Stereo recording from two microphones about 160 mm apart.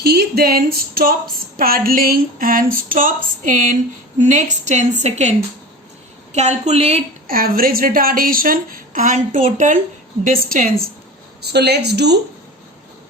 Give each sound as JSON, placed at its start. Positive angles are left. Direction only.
{"t": 0.0, "sound": "a woman's voice", "side_deg": -80}
{"t": 6.3, "sound": "a woman's voice", "side_deg": -45}
{"t": 7.3, "sound": "a woman's voice", "side_deg": -65}
{"t": 11.4, "sound": "a woman's voice", "side_deg": -90}